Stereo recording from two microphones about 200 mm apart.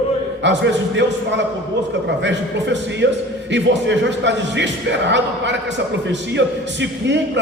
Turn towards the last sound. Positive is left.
turn(degrees=-60)  # may be behind; listen again after turning